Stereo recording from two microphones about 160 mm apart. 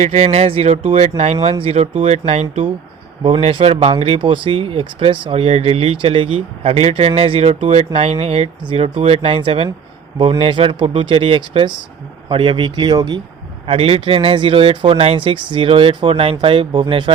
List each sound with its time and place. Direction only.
0.0 s speech: 45° right (ahead or behind); by 13.2 s 25° right (ahead or behind)
13.7 s speech: 35° right (ahead or behind)